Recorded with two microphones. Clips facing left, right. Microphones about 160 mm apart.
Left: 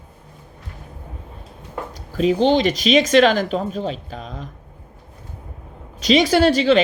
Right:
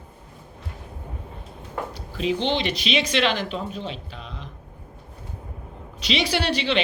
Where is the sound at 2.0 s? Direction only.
45° left (ahead or behind).